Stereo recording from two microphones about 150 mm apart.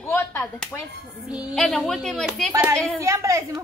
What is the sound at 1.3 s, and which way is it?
A woman's voice, 5° right (ahead or behind).